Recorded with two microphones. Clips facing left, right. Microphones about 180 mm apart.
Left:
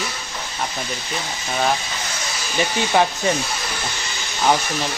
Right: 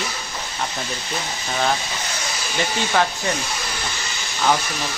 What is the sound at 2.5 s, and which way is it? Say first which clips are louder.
Speech: left 3 dB; 15° left (ahead or behind).